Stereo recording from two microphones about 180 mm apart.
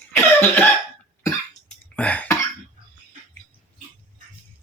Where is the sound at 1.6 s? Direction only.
5° left (ahead or behind).